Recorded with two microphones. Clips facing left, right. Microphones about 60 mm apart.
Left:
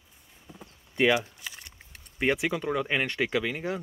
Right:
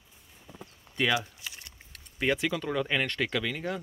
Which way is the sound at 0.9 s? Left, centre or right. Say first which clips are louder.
Left 4 dB; left.